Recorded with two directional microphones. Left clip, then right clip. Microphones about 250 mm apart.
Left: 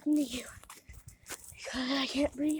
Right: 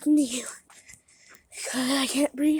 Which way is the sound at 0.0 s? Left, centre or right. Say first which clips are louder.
Right 8 dB; right.